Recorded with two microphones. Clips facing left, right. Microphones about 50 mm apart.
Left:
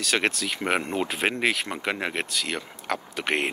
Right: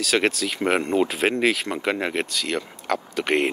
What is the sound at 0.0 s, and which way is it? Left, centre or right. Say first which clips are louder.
Speech: right 3 dB; centre.